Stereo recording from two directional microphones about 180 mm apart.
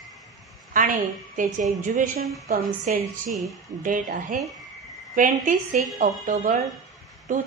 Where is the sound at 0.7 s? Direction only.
45° right (ahead or behind).